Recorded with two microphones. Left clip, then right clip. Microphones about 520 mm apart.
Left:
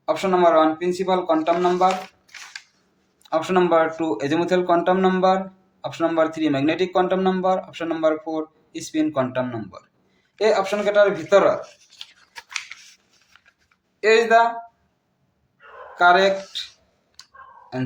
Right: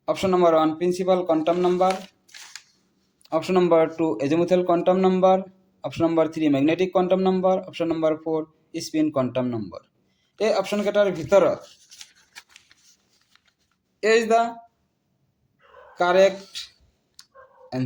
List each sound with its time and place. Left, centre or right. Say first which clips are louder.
0.0 s speech: left 2 dB; right
3.2 s a man's voice: left 1 dB; right
14.0 s speech: left 3 dB; right
16.0 s speech: left 3 dB; right